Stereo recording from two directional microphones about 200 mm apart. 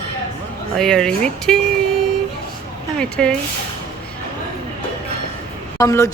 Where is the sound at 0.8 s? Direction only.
5° left (ahead or behind).